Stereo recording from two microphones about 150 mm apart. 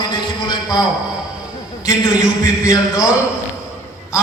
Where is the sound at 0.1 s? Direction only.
30° left (ahead or behind).